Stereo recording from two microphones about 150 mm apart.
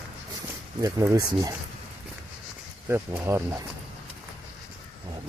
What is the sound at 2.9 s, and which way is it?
Speech, 15° right (ahead or behind).